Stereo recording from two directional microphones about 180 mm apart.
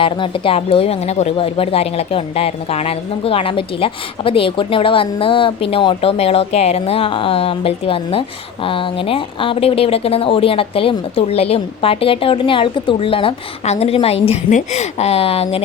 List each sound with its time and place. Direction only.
0.0 s speech: 30° left (ahead or behind)